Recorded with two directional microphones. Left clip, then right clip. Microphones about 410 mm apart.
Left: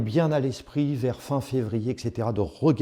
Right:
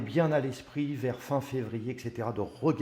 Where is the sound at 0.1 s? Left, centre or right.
Left.